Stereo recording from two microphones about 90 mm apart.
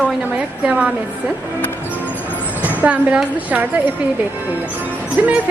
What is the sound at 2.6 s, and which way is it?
A woman's voice, 15° right (ahead or behind).